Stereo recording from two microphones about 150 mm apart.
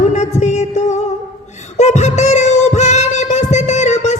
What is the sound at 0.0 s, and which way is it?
Music, 50° left (ahead or behind).